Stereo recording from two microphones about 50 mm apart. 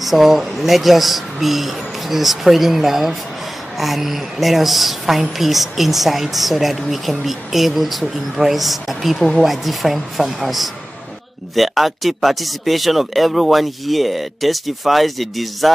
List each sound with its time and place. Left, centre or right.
0.0 s a woman's voice: centre